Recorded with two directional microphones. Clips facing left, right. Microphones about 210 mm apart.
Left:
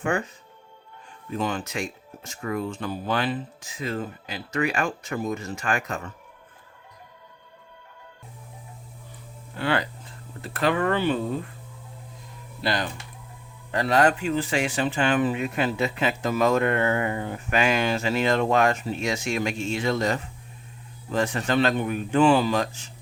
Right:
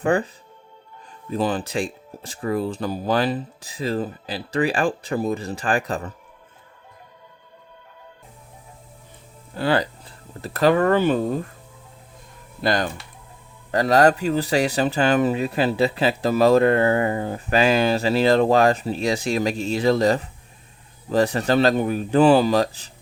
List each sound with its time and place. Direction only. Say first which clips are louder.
0.0 s speech: right 6 dB; 35° right (ahead or behind)
1.3 s speech: right 5 dB; 35° right (ahead or behind)
9.6 s speech: right 4 dB; 35° right (ahead or behind)
12.6 s speech: right 5 dB; 45° right (ahead or behind)